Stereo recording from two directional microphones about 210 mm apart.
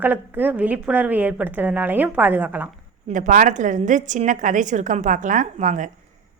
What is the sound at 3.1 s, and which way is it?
A woman's voice, 40° right (ahead or behind).